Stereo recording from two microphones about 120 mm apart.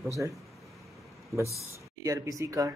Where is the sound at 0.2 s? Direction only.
25° right (ahead or behind).